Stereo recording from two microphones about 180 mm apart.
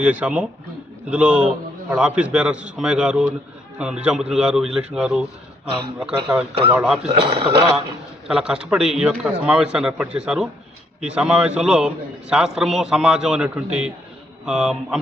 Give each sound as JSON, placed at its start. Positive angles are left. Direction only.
{"t": 0.0, "sound": "a man's voice", "side_deg": -5}
{"t": 7.1, "sound": "a man's voice", "side_deg": -30}
{"t": 8.3, "sound": "a man's voice", "side_deg": -5}